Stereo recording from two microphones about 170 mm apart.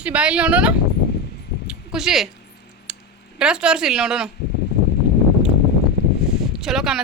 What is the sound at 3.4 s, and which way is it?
Speech, 5° right (ahead or behind).